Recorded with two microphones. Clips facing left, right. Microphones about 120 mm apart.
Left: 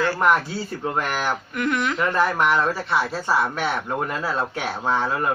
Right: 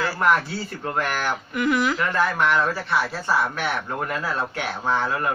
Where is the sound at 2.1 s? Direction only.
20° left (ahead or behind).